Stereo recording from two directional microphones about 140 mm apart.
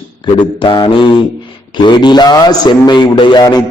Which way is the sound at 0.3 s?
35° left (ahead or behind).